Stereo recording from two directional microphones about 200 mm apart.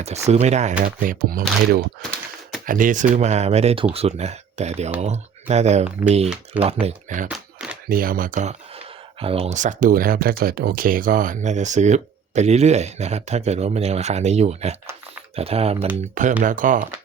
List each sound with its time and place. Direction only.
0.0 s speech: 35° right (ahead or behind)
7.3 s a sound: 5° right (ahead or behind)
7.9 s speech: 45° right (ahead or behind); by 15.9 s 30° right (ahead or behind)
16.4 s speech: 40° right (ahead or behind)